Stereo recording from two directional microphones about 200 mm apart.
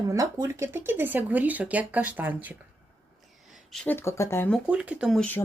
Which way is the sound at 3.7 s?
5° left (ahead or behind).